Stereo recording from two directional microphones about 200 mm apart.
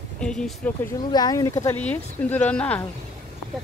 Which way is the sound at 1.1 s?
20° left (ahead or behind).